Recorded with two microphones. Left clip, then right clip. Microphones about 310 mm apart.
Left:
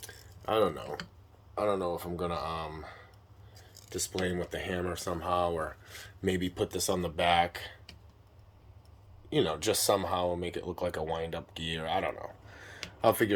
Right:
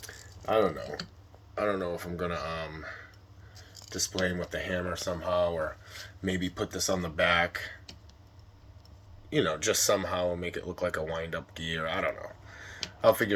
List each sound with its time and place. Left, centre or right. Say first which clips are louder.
1.5 s speech: even; centre
6.7 s speech: right 1 dB; left
7.2 s speech: right 1 dB; centre
9.3 s speech: right 1 dB; centre